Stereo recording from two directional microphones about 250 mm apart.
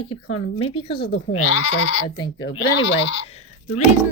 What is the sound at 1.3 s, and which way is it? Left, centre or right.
Speech, left.